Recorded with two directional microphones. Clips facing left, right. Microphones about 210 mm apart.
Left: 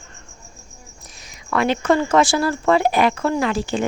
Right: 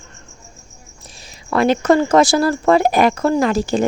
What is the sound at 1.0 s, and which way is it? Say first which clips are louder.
Speech: right 3 dB; 30° right (ahead or behind).